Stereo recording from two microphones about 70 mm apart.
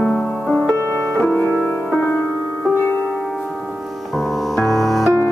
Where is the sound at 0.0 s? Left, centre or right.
Left.